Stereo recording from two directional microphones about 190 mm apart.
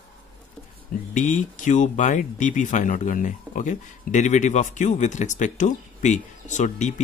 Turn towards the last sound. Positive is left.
turn(degrees=40)  # may be behind; listen again after turning